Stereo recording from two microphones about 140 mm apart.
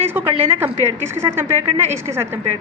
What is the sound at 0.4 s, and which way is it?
A woman's voice, 15° right (ahead or behind).